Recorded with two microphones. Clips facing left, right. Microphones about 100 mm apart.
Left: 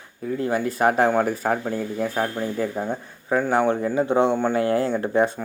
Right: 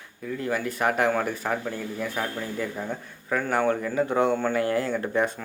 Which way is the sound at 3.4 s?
15° left (ahead or behind).